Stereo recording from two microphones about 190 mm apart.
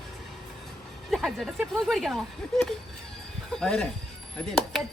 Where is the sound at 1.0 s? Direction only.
Centre (ahead or behind).